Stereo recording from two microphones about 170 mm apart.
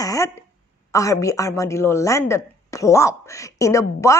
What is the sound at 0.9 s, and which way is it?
A woman's voice, 20° left (ahead or behind).